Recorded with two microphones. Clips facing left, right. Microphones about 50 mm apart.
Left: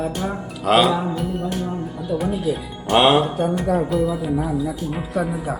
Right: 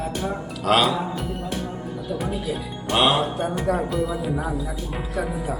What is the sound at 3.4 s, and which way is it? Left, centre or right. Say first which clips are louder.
Speech: left 3 dB; centre.